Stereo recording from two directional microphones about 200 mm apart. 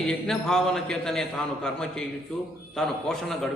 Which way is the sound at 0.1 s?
Centre (ahead or behind).